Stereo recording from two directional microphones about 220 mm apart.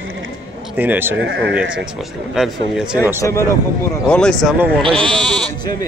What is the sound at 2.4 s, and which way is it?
Speech, 5° right (ahead or behind).